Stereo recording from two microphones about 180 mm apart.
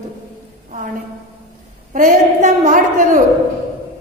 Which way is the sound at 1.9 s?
45° right (ahead or behind).